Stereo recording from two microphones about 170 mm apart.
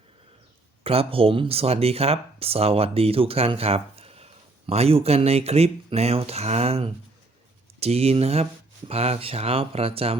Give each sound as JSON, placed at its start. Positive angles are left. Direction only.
{"t": 0.9, "sound": "speech", "side_deg": -35}